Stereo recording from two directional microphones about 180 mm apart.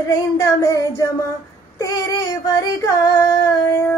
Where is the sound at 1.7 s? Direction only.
20° left (ahead or behind).